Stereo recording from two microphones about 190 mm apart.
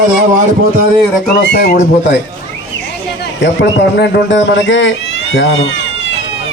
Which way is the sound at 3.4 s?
65° left (ahead or behind).